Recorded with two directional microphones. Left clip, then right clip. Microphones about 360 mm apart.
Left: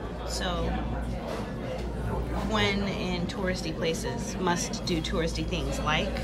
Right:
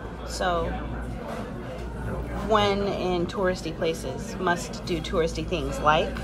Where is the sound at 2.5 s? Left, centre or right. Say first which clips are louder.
Right 6 dB; centre.